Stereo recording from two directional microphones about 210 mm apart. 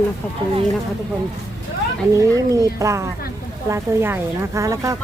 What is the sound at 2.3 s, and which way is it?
A woman's voice, 15° right (ahead or behind).